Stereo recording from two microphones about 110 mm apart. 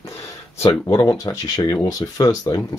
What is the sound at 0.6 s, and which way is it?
Speech, 30° left (ahead or behind).